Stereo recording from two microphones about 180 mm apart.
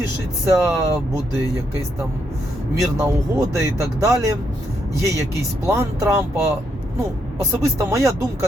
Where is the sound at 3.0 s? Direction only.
15° right (ahead or behind).